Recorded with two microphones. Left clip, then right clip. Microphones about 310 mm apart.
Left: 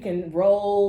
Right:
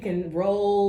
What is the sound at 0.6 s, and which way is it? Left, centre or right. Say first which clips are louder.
Speech: left 1 dB; centre.